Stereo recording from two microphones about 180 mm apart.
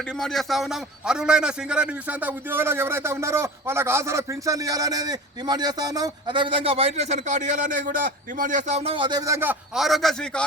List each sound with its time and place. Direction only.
0.2 s a man's voice: centre (ahead or behind); by 9.6 s 15° right (ahead or behind)
9.7 s a man's voice: centre (ahead or behind)